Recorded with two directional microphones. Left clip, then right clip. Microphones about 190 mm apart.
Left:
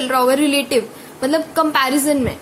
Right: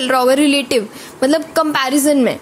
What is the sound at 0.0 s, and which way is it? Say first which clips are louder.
A woman's voice: right 3 dB; 50° right (ahead or behind).